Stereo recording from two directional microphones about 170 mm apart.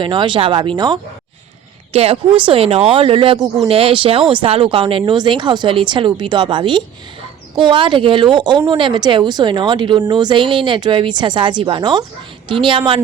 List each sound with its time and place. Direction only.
0.0 s speech: 30° right (ahead or behind)
1.9 s a woman's voice: 35° right (ahead or behind)